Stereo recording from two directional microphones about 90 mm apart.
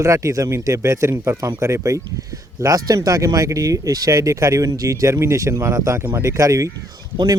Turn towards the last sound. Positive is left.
turn(degrees=-45)  # may be behind; listen again after turning